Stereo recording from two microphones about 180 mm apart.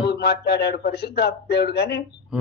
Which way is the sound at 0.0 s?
65° left (ahead or behind).